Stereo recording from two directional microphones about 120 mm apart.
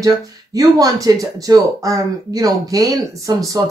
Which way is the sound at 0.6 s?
30° right (ahead or behind).